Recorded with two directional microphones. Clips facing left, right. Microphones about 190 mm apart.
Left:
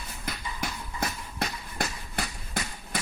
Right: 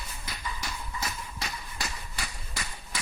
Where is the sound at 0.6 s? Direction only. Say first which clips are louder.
Left 9 dB; 55° left (ahead or behind).